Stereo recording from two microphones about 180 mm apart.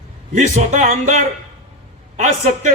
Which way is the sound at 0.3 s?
40° right (ahead or behind).